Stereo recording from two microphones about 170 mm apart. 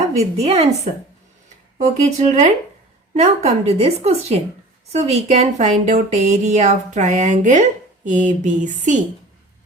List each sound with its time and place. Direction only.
0.3 s a woman's voice: 35° right (ahead or behind)
1.8 s a woman's voice: 45° right (ahead or behind)